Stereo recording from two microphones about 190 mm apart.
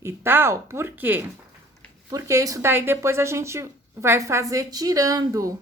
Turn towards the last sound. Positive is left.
turn(degrees=-20)  # may be behind; listen again after turning